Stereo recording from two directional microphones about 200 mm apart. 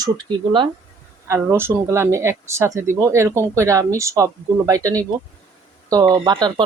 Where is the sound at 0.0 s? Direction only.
20° right (ahead or behind).